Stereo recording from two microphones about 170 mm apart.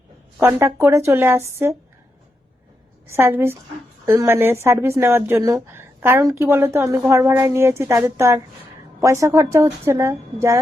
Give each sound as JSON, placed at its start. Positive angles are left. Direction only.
{"t": 0.3, "sound": "speech", "side_deg": -15}
{"t": 3.1, "sound": "speech", "side_deg": -15}